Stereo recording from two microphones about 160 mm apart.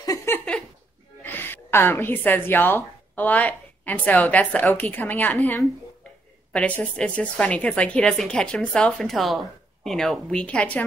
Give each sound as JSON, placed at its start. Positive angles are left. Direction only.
{"t": 0.0, "sound": "a sound", "side_deg": 20}
{"t": 1.2, "sound": "a woman's voice", "side_deg": 15}
{"t": 6.5, "sound": "a woman's voice", "side_deg": 5}